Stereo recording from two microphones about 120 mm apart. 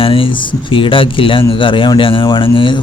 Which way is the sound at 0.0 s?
50° left (ahead or behind).